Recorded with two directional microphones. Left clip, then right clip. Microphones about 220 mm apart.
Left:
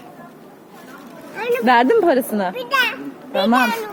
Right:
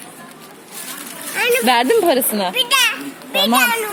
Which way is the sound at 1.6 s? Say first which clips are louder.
Left 3 dB; centre (ahead or behind).